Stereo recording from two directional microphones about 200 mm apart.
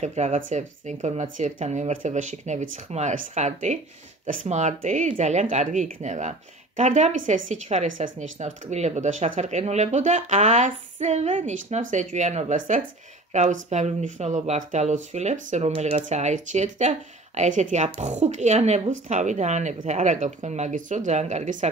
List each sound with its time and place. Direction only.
0.0 s speech: 35° right (ahead or behind)